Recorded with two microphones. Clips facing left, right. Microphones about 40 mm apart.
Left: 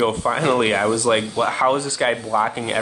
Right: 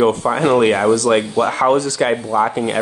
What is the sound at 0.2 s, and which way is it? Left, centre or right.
Speech, centre.